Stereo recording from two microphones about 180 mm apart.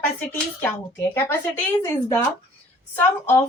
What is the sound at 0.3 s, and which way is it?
Speech, 15° left (ahead or behind).